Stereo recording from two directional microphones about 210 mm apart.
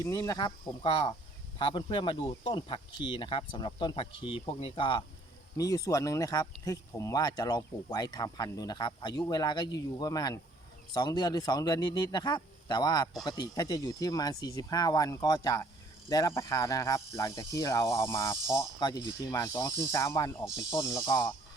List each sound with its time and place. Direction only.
0.0 s speech: 15° left (ahead or behind)